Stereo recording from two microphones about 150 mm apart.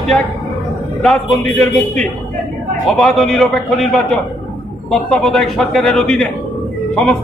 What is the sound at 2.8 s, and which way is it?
Speech, centre (ahead or behind).